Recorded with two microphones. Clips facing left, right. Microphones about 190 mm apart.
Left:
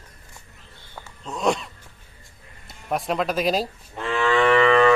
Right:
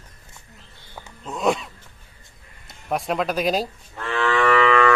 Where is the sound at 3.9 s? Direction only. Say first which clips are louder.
Left 1 dB; 20° left (ahead or behind).